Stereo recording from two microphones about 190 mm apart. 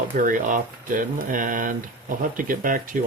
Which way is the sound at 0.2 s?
45° right (ahead or behind).